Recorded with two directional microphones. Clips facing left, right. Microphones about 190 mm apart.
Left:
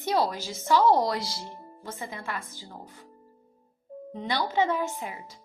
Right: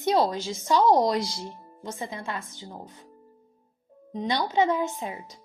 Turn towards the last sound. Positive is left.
turn(degrees=-20)  # may be behind; listen again after turning